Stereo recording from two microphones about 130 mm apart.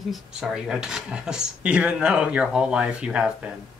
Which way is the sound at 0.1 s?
5° right (ahead or behind).